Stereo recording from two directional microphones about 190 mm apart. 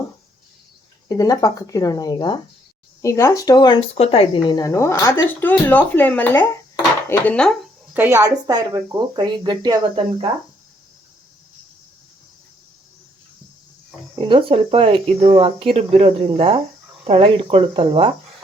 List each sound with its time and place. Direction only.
1.0 s speech: 20° left (ahead or behind); by 7.7 s 5° left (ahead or behind)
7.9 s speech: 10° right (ahead or behind)
14.2 s speech: 30° right (ahead or behind)